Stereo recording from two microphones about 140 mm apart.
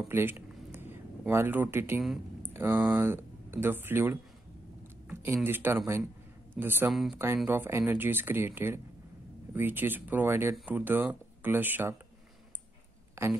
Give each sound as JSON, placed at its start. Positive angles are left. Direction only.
{"t": 0.1, "sound": "a sound", "side_deg": -15}
{"t": 2.4, "sound": "speech", "side_deg": -15}
{"t": 6.9, "sound": "speech", "side_deg": 0}
{"t": 7.4, "sound": "speech", "side_deg": -15}
{"t": 13.2, "sound": "speech", "side_deg": -20}